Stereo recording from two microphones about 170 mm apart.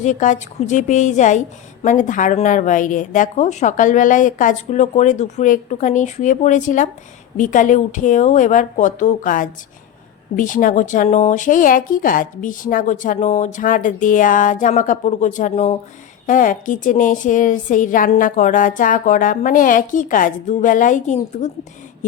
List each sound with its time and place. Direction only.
0.0 s a woman's voice: 45° left (ahead or behind)